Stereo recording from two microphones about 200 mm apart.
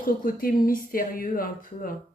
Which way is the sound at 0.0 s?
45° left (ahead or behind).